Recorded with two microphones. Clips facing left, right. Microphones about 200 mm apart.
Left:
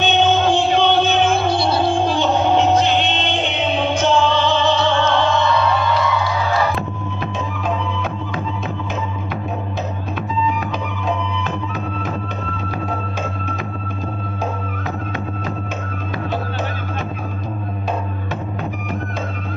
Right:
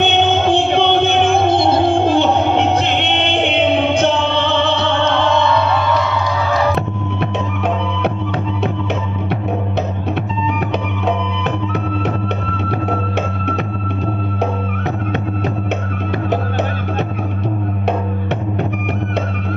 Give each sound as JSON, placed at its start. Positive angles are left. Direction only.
{"t": 0.0, "sound": "music", "side_deg": -60}
{"t": 6.7, "sound": "music", "side_deg": -70}
{"t": 11.1, "sound": "music", "side_deg": -70}